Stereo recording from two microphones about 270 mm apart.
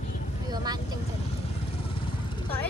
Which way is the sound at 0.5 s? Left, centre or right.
Centre.